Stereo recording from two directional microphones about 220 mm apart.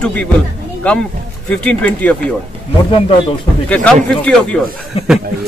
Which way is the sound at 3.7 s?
5° left (ahead or behind).